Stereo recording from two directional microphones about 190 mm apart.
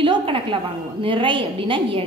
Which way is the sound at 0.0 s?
25° right (ahead or behind).